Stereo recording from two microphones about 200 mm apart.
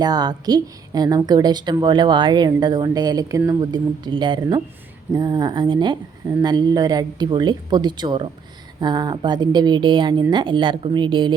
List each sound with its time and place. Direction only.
0.0 s a woman's voice: 20° right (ahead or behind)